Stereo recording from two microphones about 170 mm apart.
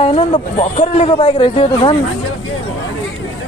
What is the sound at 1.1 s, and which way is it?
Speech, 30° left (ahead or behind).